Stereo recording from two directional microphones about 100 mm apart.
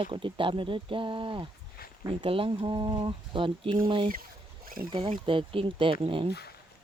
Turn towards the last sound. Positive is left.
turn(degrees=-65)  # may be behind; listen again after turning